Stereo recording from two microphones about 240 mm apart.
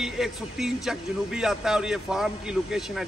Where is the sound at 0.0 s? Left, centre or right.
Centre.